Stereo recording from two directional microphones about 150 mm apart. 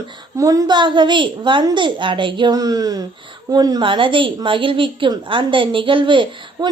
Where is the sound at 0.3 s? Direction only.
25° right (ahead or behind).